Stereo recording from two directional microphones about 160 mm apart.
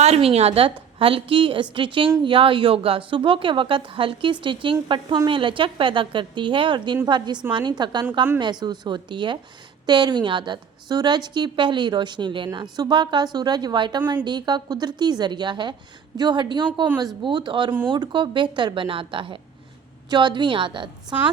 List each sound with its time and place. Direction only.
0.0 s a woman's voice: 40° right (ahead or behind)